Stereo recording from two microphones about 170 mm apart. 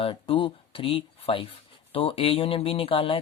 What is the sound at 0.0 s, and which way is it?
Speech, 30° left (ahead or behind).